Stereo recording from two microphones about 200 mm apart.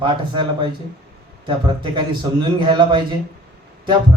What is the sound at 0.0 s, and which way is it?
A man's voice, 25° right (ahead or behind).